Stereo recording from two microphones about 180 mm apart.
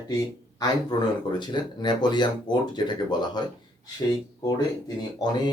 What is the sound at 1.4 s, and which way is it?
Speech, 25° left (ahead or behind).